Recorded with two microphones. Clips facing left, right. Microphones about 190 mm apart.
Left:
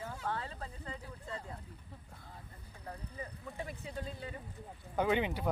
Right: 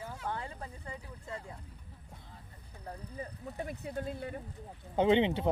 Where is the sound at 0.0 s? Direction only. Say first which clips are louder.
Even; 15° right (ahead or behind).